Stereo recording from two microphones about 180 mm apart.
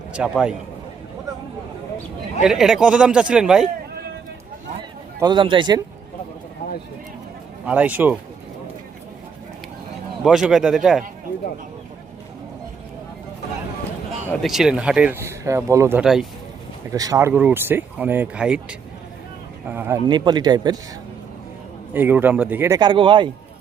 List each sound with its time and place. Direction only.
0.1 s a man's voice: 5° right (ahead or behind)
2.4 s a man's voice: centre (ahead or behind)
5.2 s speech: 25° right (ahead or behind)
7.6 s speech: 5° right (ahead or behind)
10.2 s a man's voice: centre (ahead or behind)
14.4 s speech: centre (ahead or behind)
20.1 s speech: 25° right (ahead or behind)
21.9 s speech: 10° right (ahead or behind)
22.8 s speech: 25° right (ahead or behind)